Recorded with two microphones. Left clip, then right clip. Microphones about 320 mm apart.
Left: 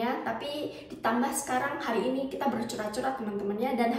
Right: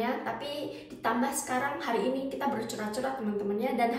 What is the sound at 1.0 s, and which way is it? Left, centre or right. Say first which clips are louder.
A woman's voice: left 1 dB; centre.